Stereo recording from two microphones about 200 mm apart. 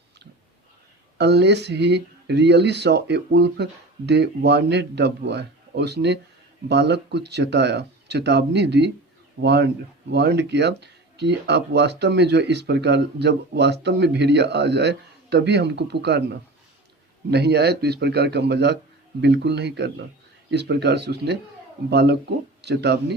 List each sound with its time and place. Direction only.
1.2 s speech: 55° right (ahead or behind)